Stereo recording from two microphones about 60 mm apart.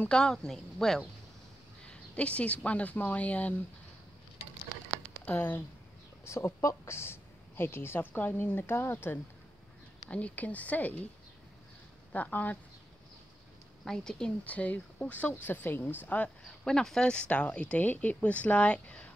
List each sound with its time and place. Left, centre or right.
0.1 s speech: centre
2.1 s speech: left
5.2 s speech: left
6.2 s a woman's voice: left
10.0 s speech: left
12.1 s speech: left
13.8 s speech: centre
14.4 s speech: left
16.6 s speech: centre